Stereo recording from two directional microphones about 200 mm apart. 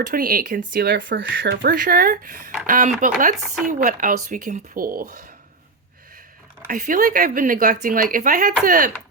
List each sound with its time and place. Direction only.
0.1 s speech: 45° right (ahead or behind); by 1.5 s 65° right (ahead or behind)
1.5 s speech: 45° right (ahead or behind)
3.3 s chopping: centre (ahead or behind)
3.7 s speech: 40° right (ahead or behind)
6.7 s speech: 40° right (ahead or behind)